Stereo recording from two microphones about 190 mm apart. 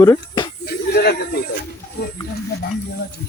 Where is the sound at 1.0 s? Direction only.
55° left (ahead or behind).